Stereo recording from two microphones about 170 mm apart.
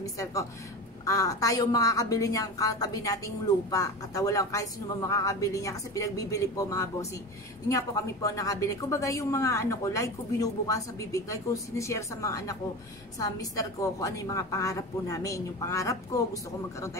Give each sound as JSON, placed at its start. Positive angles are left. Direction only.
{"t": 0.0, "sound": "speech", "side_deg": 20}